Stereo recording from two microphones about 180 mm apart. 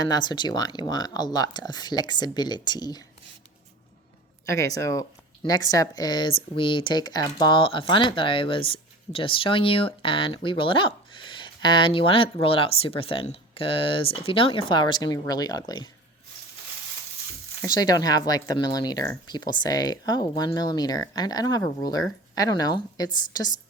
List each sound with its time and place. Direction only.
0.1 s speech: 25° left (ahead or behind)
4.4 s speech: 20° left (ahead or behind)
17.7 s speech: 20° left (ahead or behind)